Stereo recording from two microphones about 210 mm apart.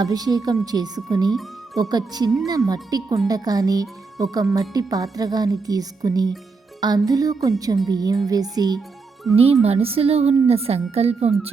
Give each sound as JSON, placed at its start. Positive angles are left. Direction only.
{"t": 0.0, "sound": "speech", "side_deg": -20}
{"t": 1.3, "sound": "music", "side_deg": 0}
{"t": 1.8, "sound": "a woman's voice", "side_deg": -20}
{"t": 9.3, "sound": "a woman's voice", "side_deg": -30}